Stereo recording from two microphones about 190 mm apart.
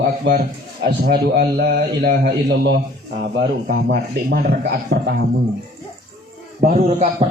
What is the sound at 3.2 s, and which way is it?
A man's voice, 50° right (ahead or behind).